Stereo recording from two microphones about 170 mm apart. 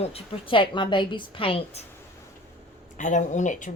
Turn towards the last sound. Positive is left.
turn(degrees=45)  # may be behind; listen again after turning